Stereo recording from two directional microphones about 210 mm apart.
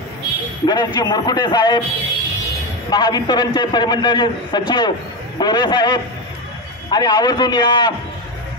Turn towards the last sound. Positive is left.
turn(degrees=20)  # may be behind; listen again after turning